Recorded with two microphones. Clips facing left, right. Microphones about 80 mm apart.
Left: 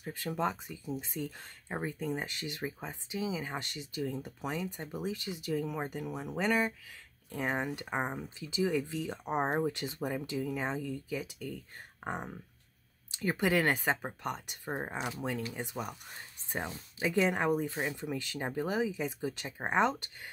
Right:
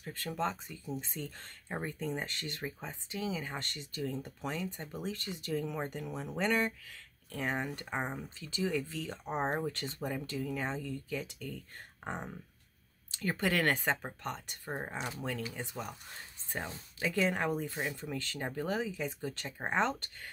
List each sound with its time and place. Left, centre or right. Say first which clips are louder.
0.0 s speech: left 2 dB; centre